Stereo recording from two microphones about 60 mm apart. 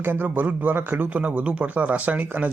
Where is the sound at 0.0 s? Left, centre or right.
Right.